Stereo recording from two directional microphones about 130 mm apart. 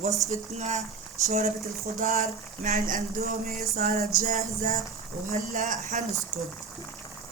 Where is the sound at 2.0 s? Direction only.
90° right.